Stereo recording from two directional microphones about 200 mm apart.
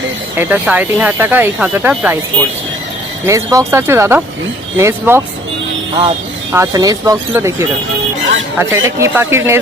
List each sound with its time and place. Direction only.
0.3 s speech: 5° right (ahead or behind)
3.2 s speech: 15° right (ahead or behind)
6.5 s speech: 15° right (ahead or behind)
8.5 s speech: 10° right (ahead or behind)